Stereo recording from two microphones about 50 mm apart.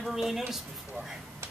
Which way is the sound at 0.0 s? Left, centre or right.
Centre.